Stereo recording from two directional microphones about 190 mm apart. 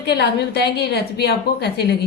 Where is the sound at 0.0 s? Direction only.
60° left (ahead or behind).